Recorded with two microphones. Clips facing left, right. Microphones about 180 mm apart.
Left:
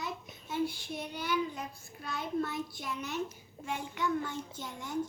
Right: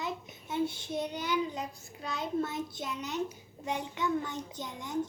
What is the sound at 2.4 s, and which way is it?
A child's voice, 20° right (ahead or behind).